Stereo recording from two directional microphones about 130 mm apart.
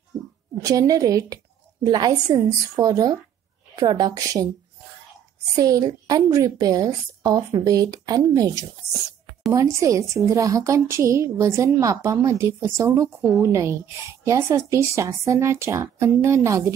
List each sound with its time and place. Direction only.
0.6 s a woman's voice: 25° right (ahead or behind)
5.6 s a woman's voice: 30° right (ahead or behind)